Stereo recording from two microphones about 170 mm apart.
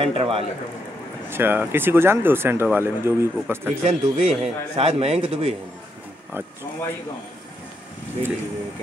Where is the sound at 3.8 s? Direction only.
45° right (ahead or behind).